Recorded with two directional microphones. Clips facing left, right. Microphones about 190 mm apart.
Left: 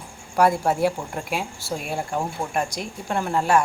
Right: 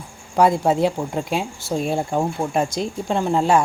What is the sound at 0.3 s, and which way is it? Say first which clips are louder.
Speech: right 3 dB; 20° right (ahead or behind).